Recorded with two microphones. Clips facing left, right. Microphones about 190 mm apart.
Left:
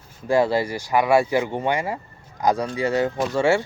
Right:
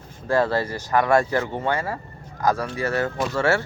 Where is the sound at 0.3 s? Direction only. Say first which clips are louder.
Left 2 dB; 15° left (ahead or behind).